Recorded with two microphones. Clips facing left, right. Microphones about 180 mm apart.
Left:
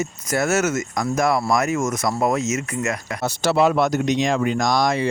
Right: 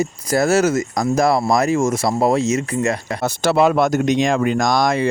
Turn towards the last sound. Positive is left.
turn(degrees=-55)  # may be behind; listen again after turning